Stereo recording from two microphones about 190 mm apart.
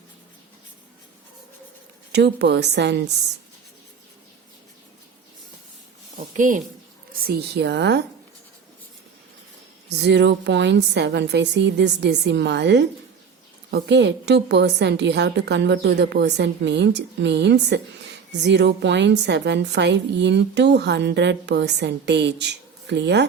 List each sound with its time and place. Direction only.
2.1 s a woman's voice: 60° right (ahead or behind)
6.3 s a woman's voice: 45° right (ahead or behind)
7.2 s a woman's voice: 55° right (ahead or behind)
9.9 s a woman's voice: 65° right (ahead or behind)